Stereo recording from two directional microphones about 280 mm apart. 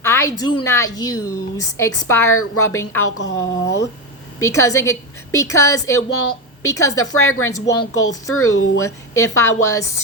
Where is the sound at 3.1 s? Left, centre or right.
Left.